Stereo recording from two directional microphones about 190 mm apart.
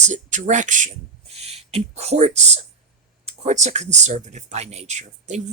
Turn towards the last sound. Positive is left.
turn(degrees=-35)  # may be behind; listen again after turning